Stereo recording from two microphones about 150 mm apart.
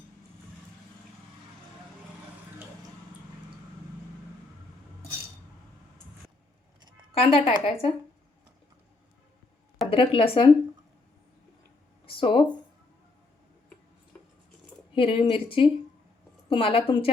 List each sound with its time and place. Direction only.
7.1 s a woman's voice: 40° left (ahead or behind)
9.9 s a woman's voice: 35° left (ahead or behind)
12.2 s a woman's voice: 35° left (ahead or behind)
14.9 s a woman's voice: 35° left (ahead or behind)